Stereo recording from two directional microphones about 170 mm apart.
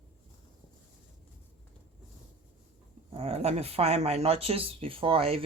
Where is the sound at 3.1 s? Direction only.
35° right (ahead or behind).